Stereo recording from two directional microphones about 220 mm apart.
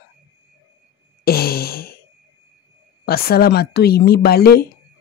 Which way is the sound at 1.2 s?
45° left (ahead or behind).